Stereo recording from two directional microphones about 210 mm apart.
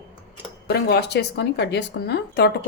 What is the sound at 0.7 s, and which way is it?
A woman's voice, 50° left (ahead or behind).